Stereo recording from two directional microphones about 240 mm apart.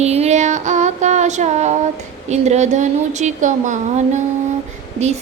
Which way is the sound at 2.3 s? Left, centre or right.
Right.